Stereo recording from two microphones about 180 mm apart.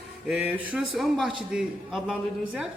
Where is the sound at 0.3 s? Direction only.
5° right (ahead or behind).